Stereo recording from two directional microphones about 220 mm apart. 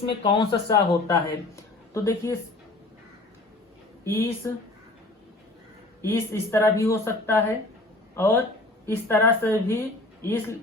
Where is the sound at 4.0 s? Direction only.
10° left (ahead or behind).